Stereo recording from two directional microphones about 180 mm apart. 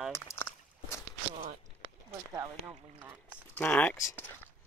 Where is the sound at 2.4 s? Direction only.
15° right (ahead or behind).